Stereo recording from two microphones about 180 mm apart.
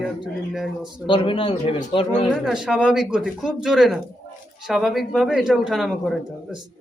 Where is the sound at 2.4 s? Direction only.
Centre (ahead or behind).